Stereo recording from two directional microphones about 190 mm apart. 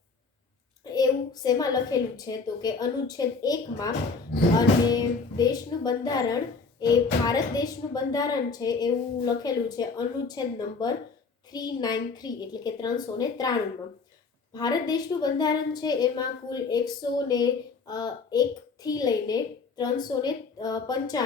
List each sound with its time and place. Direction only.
0.9 s a woman's voice: 20° left (ahead or behind)